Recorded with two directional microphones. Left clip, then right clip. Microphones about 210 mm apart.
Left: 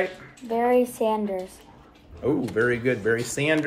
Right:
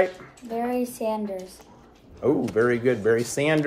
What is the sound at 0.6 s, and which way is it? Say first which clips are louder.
Speech: left 6 dB; 10° left (ahead or behind).